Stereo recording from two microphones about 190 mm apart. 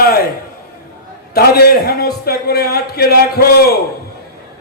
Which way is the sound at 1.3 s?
55° left (ahead or behind).